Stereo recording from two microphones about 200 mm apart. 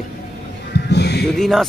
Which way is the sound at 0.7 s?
55° left (ahead or behind).